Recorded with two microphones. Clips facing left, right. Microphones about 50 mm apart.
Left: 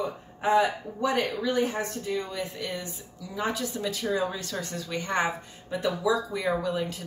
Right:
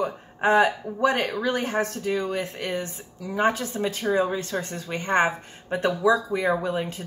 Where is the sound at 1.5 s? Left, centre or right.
Right.